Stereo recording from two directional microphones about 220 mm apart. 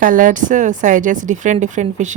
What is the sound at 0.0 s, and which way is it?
Speech, 40° right (ahead or behind).